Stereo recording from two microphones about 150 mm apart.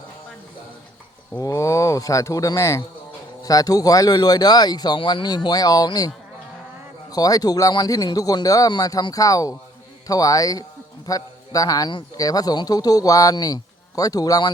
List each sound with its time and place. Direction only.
1.4 s a man's voice: 20° left (ahead or behind)
7.1 s a man's voice: 25° left (ahead or behind)